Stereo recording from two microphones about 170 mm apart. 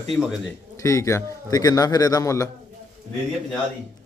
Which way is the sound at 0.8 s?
20° left (ahead or behind).